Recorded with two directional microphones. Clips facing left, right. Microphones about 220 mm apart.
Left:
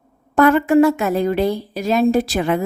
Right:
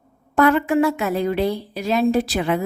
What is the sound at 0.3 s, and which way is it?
A woman's voice, 45° left (ahead or behind).